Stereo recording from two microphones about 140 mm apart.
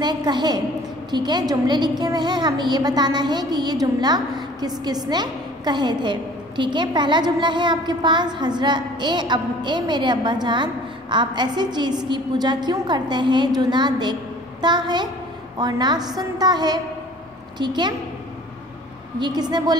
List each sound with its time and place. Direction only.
0.0 s a woman's voice: 30° right (ahead or behind)
19.1 s a woman's voice: 30° right (ahead or behind)